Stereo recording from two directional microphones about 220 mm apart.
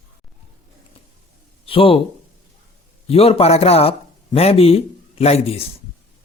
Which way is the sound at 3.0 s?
25° left (ahead or behind).